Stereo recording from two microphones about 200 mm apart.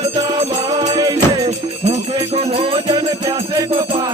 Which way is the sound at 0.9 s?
20° right (ahead or behind).